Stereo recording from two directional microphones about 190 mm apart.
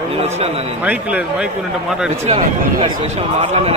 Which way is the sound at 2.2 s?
30° right (ahead or behind).